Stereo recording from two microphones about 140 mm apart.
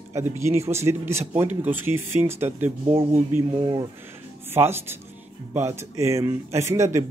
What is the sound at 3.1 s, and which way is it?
A man's voice, 20° right (ahead or behind).